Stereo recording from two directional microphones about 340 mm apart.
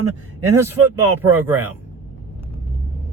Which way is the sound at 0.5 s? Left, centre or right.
Centre.